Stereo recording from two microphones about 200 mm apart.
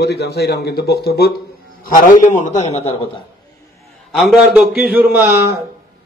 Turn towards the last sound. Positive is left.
turn(degrees=-10)  # may be behind; listen again after turning